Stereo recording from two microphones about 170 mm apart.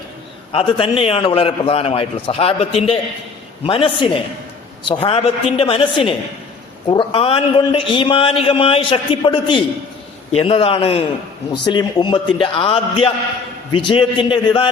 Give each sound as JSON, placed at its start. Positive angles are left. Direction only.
{"t": 0.5, "sound": "a man's voice", "side_deg": 35}